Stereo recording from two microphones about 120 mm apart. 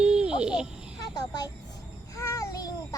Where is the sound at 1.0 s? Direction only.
35° left (ahead or behind).